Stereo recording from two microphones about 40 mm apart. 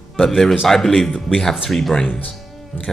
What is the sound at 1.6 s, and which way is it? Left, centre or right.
Speech, centre.